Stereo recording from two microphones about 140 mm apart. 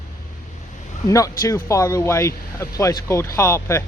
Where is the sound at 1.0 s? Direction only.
20° left (ahead or behind).